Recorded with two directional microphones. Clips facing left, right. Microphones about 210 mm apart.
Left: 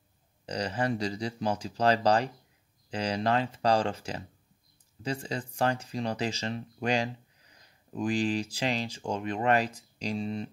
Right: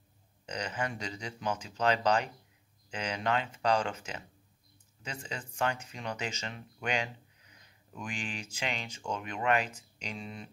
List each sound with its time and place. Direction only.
0.5 s speech: 35° left (ahead or behind)